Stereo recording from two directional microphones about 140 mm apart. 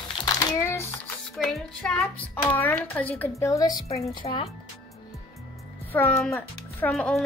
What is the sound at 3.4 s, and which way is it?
Speech, 25° left (ahead or behind).